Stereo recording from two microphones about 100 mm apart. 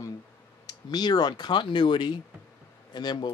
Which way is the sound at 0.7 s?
45° left (ahead or behind).